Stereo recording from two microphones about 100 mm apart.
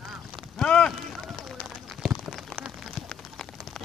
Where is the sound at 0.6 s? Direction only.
10° left (ahead or behind).